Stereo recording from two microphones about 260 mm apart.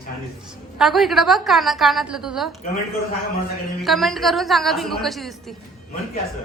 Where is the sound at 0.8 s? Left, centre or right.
Centre.